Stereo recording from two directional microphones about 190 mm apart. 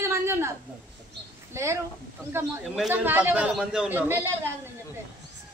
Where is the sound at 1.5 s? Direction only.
15° right (ahead or behind).